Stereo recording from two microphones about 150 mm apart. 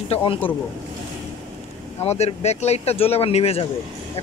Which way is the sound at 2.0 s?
45° left (ahead or behind).